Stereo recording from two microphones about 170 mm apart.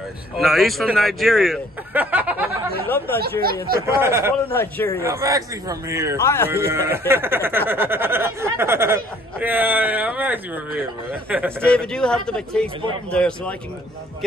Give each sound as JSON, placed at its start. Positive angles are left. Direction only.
{"t": 0.4, "sound": "speech", "side_deg": 0}
{"t": 2.0, "sound": "a sound", "side_deg": -10}
{"t": 3.2, "sound": "speech", "side_deg": -60}
{"t": 4.0, "sound": "speech", "side_deg": -15}
{"t": 4.5, "sound": "speech", "side_deg": 10}
{"t": 5.0, "sound": "speech", "side_deg": -15}
{"t": 6.2, "sound": "speech", "side_deg": 15}
{"t": 6.5, "sound": "speech", "side_deg": -15}
{"t": 11.6, "sound": "speech", "side_deg": 5}